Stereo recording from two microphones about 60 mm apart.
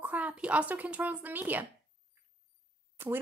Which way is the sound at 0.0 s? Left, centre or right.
Right.